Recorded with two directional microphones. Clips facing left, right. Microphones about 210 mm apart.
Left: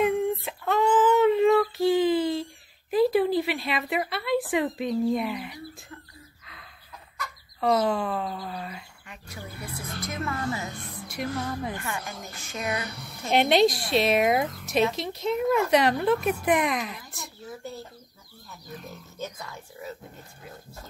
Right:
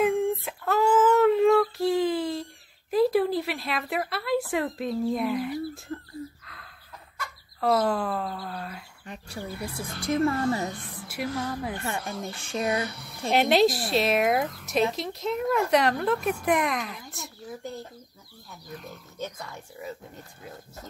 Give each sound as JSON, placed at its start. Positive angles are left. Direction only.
{"t": 0.0, "sound": "child singing", "side_deg": 5}
{"t": 2.9, "sound": "speech", "side_deg": 0}
{"t": 5.9, "sound": "speech", "side_deg": -40}
{"t": 6.4, "sound": "gasp", "side_deg": 0}
{"t": 7.6, "sound": "speech", "side_deg": 0}
{"t": 9.0, "sound": "speech", "side_deg": -35}
{"t": 11.1, "sound": "speech", "side_deg": -5}
{"t": 11.8, "sound": "speech", "side_deg": -35}
{"t": 13.3, "sound": "speech", "side_deg": 0}
{"t": 19.1, "sound": "speech", "side_deg": 5}